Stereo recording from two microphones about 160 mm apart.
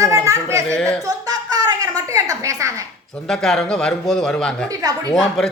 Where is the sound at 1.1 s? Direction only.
25° right (ahead or behind).